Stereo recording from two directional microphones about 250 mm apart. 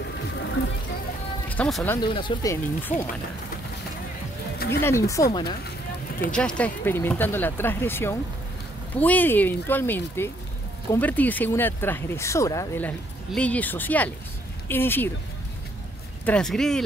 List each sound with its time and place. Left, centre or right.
1.5 s speech: centre
2.0 s speech: centre
4.6 s a sound: left
4.8 s speech: centre
6.3 s speech: centre
16.3 s speech: centre